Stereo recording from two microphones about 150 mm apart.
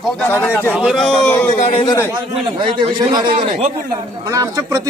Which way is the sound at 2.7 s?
30° right (ahead or behind).